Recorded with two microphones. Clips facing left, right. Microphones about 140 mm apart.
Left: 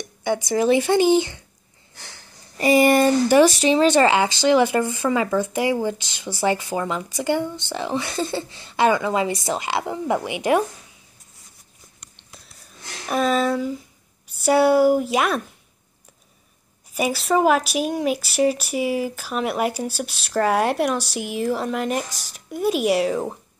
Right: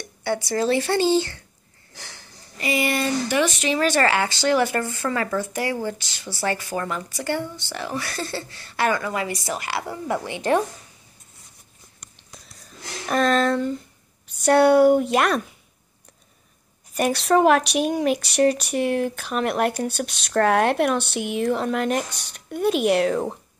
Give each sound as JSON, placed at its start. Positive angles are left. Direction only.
{"t": 0.2, "sound": "speech", "side_deg": 15}
{"t": 2.6, "sound": "speech", "side_deg": 45}
{"t": 12.2, "sound": "whispering", "side_deg": 0}
{"t": 13.1, "sound": "speech", "side_deg": 5}
{"t": 16.9, "sound": "speech", "side_deg": 5}